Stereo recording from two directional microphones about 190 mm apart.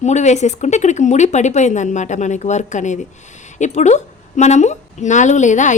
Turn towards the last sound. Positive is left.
turn(degrees=40)  # may be behind; listen again after turning